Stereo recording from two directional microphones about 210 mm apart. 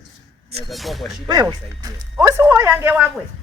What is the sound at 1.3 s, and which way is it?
Speech, 20° right (ahead or behind).